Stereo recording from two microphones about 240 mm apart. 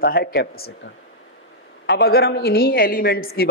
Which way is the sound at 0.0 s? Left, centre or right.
Left.